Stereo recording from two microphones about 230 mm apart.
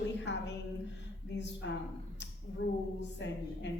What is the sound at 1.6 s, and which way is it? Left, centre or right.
Speech, left.